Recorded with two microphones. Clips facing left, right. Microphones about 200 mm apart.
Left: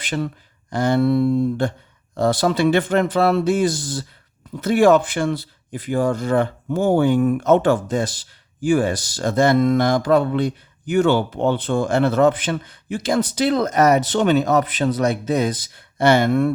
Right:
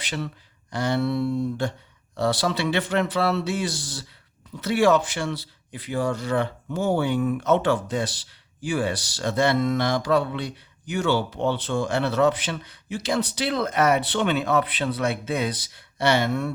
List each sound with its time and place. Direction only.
0.0 s speech: 50° left (ahead or behind)